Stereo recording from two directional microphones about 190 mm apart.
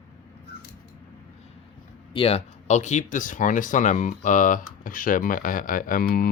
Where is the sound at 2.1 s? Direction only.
30° left (ahead or behind).